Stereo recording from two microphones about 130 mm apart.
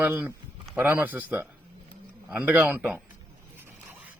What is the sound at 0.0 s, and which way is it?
Speech, 15° right (ahead or behind).